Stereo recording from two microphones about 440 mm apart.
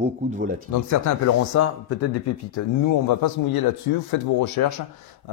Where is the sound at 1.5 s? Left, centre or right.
Left.